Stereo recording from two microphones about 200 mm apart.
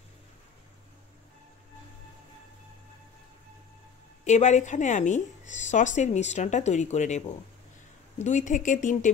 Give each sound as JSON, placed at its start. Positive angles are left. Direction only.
{"t": 4.2, "sound": "speech", "side_deg": 35}